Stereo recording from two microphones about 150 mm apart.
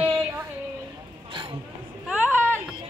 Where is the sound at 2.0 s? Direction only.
10° right (ahead or behind).